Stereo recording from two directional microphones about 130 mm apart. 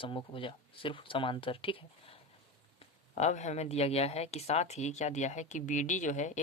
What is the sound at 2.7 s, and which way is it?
Speech, 60° left (ahead or behind).